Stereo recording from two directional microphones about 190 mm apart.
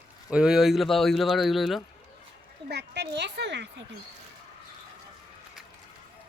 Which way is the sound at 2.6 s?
60° right (ahead or behind).